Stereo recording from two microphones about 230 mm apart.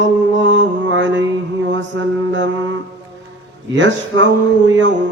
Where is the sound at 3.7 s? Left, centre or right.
Right.